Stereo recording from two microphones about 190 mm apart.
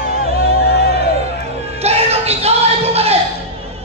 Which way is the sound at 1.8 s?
35° right (ahead or behind).